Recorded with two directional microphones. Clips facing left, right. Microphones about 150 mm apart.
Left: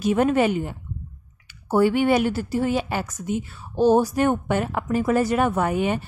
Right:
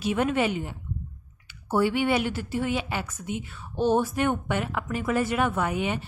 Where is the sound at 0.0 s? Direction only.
40° left (ahead or behind).